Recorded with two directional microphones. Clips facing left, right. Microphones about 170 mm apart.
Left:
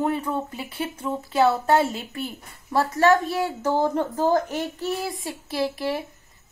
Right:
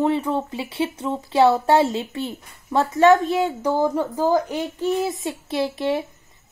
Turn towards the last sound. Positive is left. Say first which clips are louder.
# right 3 dB
turn(degrees=-25)  # may be behind; listen again after turning